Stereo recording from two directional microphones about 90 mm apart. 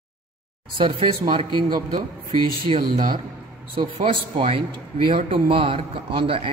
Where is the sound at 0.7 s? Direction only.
65° right (ahead or behind).